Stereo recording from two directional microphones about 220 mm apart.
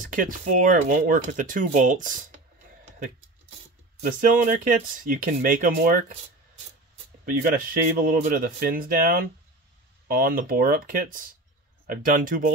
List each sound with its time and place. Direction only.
0.0 s speech: 40° right (ahead or behind)
4.0 s speech: 40° right (ahead or behind)
7.2 s speech: 40° right (ahead or behind)